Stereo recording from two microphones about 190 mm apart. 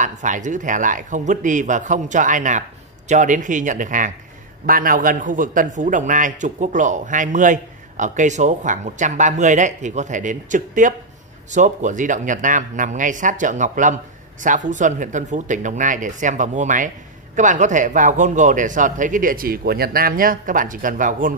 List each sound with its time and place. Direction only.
0.0 s a man's voice: 40° right (ahead or behind)